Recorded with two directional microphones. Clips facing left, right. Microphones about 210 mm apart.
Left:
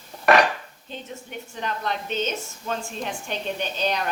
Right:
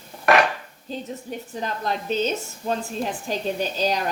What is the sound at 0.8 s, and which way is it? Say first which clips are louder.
A woman's voice: right 6 dB; 35° right (ahead or behind).